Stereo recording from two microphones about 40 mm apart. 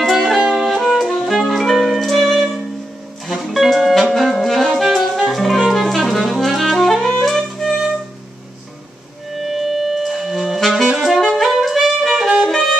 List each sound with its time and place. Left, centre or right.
0.0 s music: centre
0.4 s music: right
0.7 s saxophone: centre
0.9 s music: centre
9.4 s music: centre
11.1 s saxophone: centre
12.4 s saxophone: centre